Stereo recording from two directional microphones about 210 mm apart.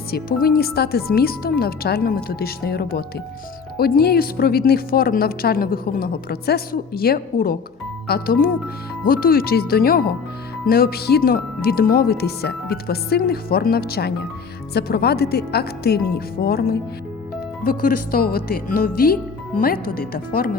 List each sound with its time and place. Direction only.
0.1 s speech: 45° left (ahead or behind)